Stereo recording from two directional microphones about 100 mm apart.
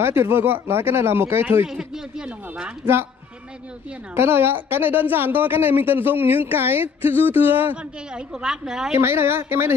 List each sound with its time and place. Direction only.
0.0 s a woman's voice: 25° right (ahead or behind)
1.7 s speech: 5° right (ahead or behind)
2.8 s a woman's voice: 25° right (ahead or behind)
4.1 s a woman's voice: 25° right (ahead or behind); by 8.9 s 5° right (ahead or behind)
9.0 s a woman's voice: 25° right (ahead or behind)